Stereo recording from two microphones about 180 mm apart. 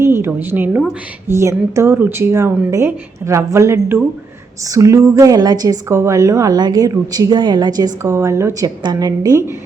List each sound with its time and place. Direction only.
0.0 s a woman's voice: 15° right (ahead or behind)